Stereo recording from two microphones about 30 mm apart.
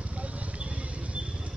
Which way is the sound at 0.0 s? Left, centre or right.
Right.